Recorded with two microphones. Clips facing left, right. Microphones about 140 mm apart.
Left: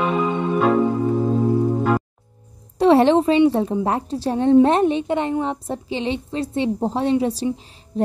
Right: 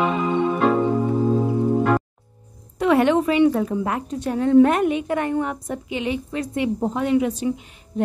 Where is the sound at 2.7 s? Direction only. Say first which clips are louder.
Left 3 dB; 30° left (ahead or behind).